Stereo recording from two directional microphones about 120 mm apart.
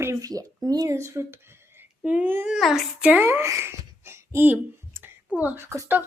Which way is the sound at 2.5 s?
Centre (ahead or behind).